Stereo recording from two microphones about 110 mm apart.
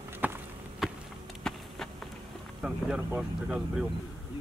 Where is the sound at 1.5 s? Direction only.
5° left (ahead or behind).